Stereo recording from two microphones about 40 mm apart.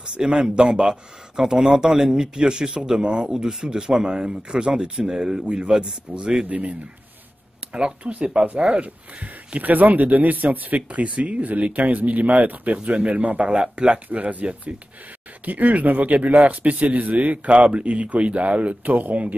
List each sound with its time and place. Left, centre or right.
0.0 s speech: right
6.5 s a man's voice: right
8.0 s a man's voice: right
13.5 s speech: right
14.0 s a man's voice: right